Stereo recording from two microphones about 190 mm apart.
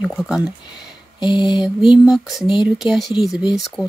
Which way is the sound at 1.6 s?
5° right (ahead or behind).